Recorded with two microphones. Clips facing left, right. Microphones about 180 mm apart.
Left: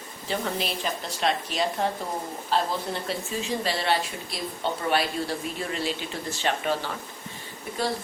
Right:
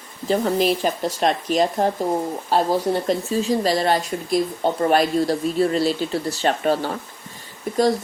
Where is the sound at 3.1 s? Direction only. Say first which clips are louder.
Right 9 dB; 40° right (ahead or behind).